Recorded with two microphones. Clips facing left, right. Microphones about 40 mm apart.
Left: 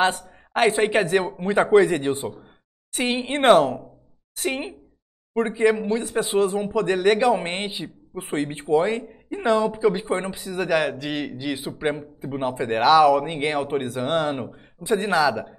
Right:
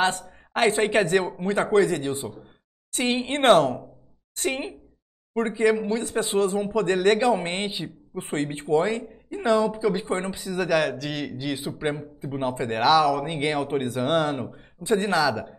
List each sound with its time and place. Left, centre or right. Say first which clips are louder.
0.0 s speech: left 2 dB; centre
2.9 s speech: left 1 dB; centre